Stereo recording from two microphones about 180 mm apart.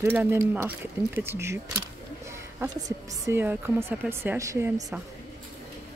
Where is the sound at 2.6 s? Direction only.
15° right (ahead or behind).